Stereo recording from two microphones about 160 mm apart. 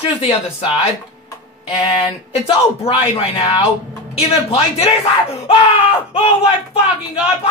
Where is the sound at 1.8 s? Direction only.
35° left (ahead or behind).